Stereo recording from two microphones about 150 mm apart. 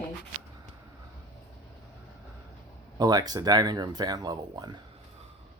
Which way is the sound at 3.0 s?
25° right (ahead or behind).